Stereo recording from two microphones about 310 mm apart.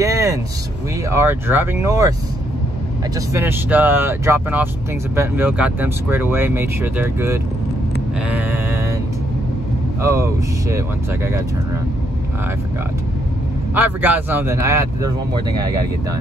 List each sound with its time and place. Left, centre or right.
0.0 s vehicle: centre
1.1 s speech: centre
3.2 s speech: centre
8.3 s sheep: centre
10.0 s speech: centre
13.7 s speech: centre